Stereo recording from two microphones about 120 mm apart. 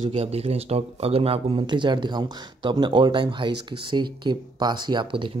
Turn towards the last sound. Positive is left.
turn(degrees=-40)  # may be behind; listen again after turning